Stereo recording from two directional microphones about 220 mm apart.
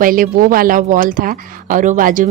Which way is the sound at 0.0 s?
40° right (ahead or behind).